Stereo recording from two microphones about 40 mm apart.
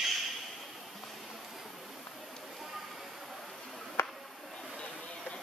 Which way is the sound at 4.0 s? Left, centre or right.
Left.